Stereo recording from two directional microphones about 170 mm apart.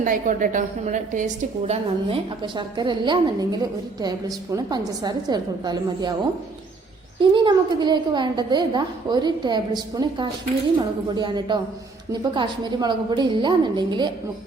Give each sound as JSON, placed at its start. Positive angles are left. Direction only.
{"t": 0.0, "sound": "a woman's voice", "side_deg": -50}
{"t": 2.4, "sound": "a woman's voice", "side_deg": -25}
{"t": 7.2, "sound": "a woman's voice", "side_deg": -30}